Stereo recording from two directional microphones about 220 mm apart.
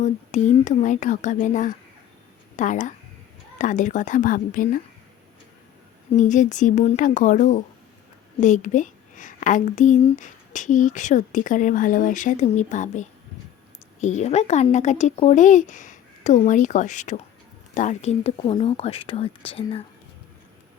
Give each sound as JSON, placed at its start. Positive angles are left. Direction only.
{"t": 0.0, "sound": "a woman's voice", "side_deg": 30}
{"t": 6.1, "sound": "a woman's voice", "side_deg": 35}